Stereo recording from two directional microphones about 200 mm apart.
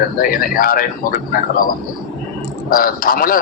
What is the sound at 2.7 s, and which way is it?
Speech, 45° left (ahead or behind).